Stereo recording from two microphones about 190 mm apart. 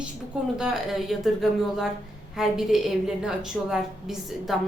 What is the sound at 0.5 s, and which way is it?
A woman's voice, centre (ahead or behind).